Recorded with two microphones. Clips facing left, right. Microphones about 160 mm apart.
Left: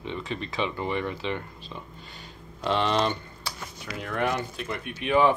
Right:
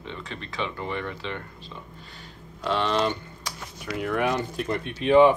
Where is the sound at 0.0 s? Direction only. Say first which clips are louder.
Left 4 dB; 20° left (ahead or behind).